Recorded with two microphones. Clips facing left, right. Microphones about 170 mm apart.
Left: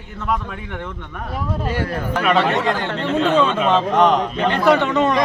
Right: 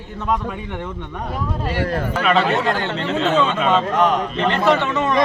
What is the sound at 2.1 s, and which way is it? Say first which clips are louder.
Speech: left 2 dB; centre (ahead or behind).